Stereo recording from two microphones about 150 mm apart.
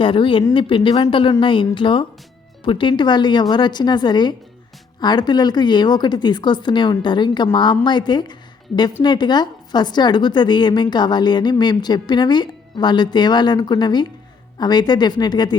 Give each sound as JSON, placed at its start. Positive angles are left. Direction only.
{"t": 0.0, "sound": "speech", "side_deg": 35}